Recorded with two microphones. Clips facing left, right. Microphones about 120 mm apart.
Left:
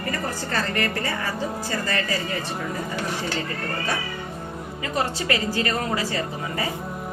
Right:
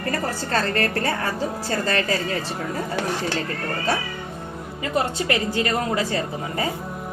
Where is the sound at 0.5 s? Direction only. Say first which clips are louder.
Right 3 dB; 15° left (ahead or behind).